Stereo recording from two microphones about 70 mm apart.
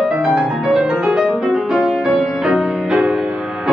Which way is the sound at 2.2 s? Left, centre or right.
Centre.